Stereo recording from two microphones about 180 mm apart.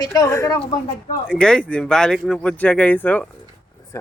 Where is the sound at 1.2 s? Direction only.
5° left (ahead or behind).